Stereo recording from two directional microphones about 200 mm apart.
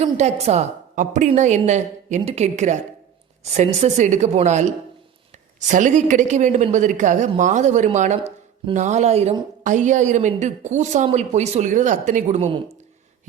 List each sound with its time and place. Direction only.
0.0 s a woman's voice: 35° right (ahead or behind)